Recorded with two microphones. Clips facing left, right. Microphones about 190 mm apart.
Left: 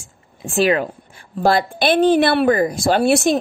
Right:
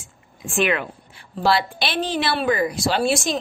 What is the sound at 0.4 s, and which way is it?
A woman's voice, 35° left (ahead or behind).